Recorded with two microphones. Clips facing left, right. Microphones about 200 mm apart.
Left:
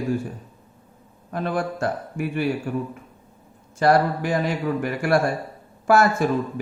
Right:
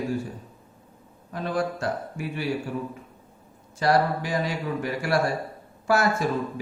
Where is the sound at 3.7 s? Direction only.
55° left (ahead or behind).